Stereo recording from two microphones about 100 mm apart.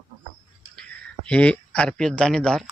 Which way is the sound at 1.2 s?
10° left (ahead or behind).